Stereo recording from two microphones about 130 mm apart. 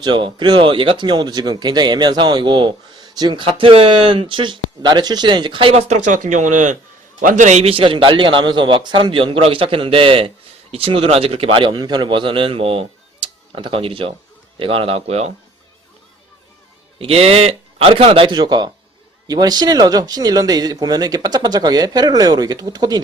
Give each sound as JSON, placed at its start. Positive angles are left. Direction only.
{"t": 0.0, "sound": "a man's voice", "side_deg": -35}
{"t": 17.0, "sound": "a man's voice", "side_deg": -50}